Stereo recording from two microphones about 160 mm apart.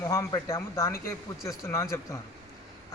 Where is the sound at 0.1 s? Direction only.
20° left (ahead or behind).